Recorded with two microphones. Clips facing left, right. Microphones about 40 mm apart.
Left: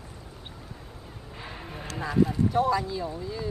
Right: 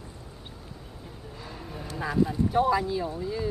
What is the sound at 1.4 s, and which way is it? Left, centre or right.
Vehicle, left.